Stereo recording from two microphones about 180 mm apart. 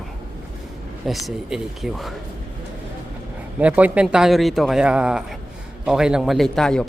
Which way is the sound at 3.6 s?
10° right (ahead or behind).